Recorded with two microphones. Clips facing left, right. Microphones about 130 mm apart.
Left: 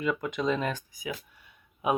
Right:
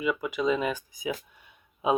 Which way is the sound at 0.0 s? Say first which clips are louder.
Right 2 dB; 5° right (ahead or behind).